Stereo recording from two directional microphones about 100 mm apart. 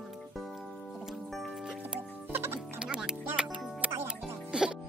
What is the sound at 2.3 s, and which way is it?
Music, 25° right (ahead or behind).